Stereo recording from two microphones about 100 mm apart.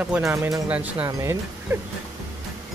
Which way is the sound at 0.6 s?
15° right (ahead or behind).